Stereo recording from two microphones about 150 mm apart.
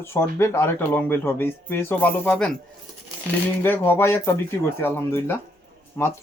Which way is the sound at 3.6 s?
15° left (ahead or behind).